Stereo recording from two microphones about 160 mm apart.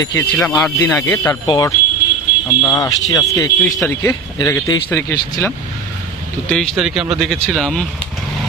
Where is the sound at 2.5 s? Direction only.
20° left (ahead or behind).